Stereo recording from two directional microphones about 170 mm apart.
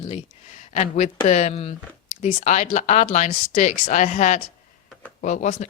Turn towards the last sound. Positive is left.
turn(degrees=45)  # may be behind; listen again after turning